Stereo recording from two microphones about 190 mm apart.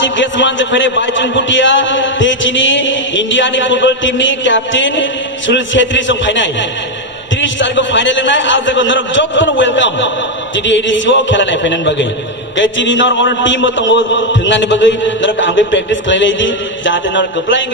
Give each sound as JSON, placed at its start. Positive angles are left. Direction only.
{"t": 0.0, "sound": "a man's voice", "side_deg": 75}